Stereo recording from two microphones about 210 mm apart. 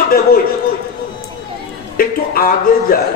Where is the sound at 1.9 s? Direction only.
45° left (ahead or behind).